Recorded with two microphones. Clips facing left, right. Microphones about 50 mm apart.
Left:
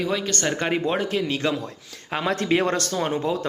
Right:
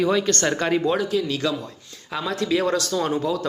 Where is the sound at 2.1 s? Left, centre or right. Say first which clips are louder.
Left 1 dB; left.